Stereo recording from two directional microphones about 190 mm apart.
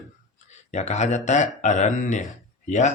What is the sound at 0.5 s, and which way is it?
Speech, 35° left (ahead or behind).